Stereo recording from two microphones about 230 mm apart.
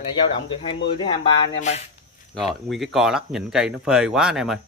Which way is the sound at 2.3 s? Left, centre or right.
Centre.